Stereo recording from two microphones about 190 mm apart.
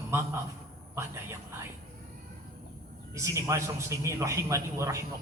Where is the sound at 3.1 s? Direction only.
15° right (ahead or behind).